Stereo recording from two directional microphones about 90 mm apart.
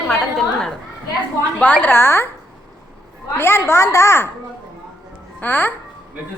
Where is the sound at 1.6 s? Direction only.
20° left (ahead or behind).